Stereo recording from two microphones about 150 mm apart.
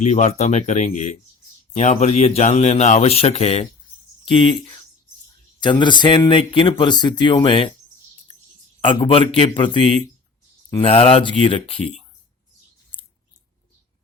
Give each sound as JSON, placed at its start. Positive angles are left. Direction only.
{"t": 0.0, "sound": "speech", "side_deg": 50}
{"t": 8.8, "sound": "speech", "side_deg": 35}